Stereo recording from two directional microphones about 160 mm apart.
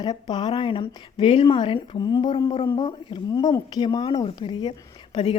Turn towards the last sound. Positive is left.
turn(degrees=30)  # may be behind; listen again after turning